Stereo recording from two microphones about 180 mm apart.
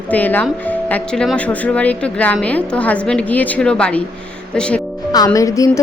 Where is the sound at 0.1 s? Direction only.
10° left (ahead or behind).